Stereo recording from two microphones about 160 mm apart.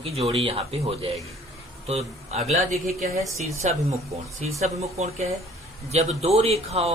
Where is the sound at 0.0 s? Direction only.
40° right (ahead or behind).